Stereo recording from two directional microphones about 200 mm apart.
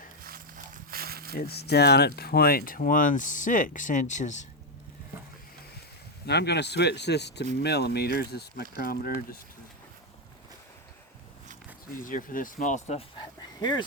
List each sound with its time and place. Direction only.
0.2 s a sound: 45° right (ahead or behind)
1.4 s speech: 55° left (ahead or behind); by 4.4 s 40° left (ahead or behind)
6.2 s speech: 55° left (ahead or behind)
11.9 s speech: 45° left (ahead or behind)
13.6 s speech: 20° left (ahead or behind)